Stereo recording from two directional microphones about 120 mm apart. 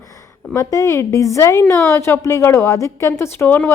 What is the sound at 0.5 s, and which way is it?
Speech, 30° left (ahead or behind).